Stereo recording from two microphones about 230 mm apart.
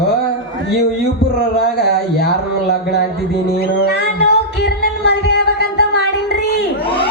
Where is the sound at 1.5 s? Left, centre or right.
Left.